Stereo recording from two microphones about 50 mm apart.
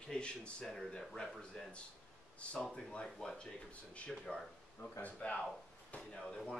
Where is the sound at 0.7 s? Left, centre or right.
Centre.